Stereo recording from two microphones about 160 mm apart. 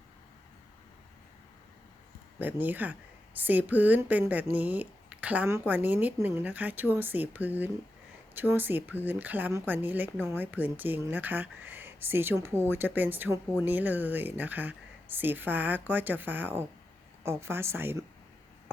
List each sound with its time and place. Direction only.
2.4 s a woman's voice: 10° right (ahead or behind)